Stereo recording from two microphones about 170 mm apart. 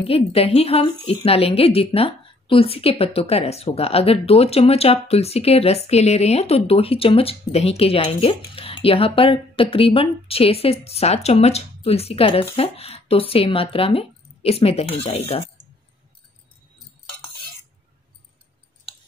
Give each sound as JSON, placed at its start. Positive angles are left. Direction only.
{"t": 0.0, "sound": "a woman's voice", "side_deg": 35}